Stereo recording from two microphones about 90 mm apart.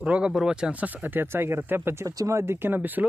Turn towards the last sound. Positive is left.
turn(degrees=-20)  # may be behind; listen again after turning